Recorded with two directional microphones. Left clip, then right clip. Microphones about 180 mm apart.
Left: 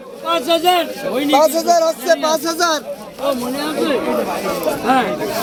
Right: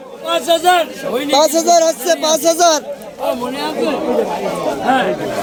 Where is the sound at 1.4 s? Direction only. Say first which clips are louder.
Right 2 dB; 45° right (ahead or behind).